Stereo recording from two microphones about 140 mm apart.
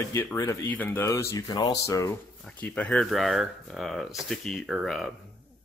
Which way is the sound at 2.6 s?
5° left (ahead or behind).